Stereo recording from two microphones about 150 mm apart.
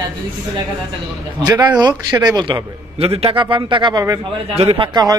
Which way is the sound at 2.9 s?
40° right (ahead or behind).